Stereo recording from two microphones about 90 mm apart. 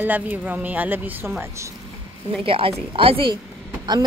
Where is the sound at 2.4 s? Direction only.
90° right.